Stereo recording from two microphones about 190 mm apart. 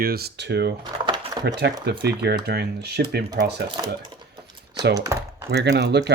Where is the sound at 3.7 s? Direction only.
25° right (ahead or behind).